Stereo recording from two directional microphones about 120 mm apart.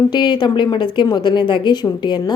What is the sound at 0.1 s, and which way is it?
A woman's voice, 40° left (ahead or behind).